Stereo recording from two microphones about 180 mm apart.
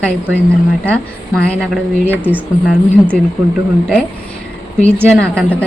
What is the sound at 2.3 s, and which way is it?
Speech, 10° right (ahead or behind).